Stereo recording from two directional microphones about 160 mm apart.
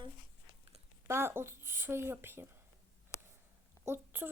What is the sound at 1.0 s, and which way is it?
A woman's voice, 15° right (ahead or behind).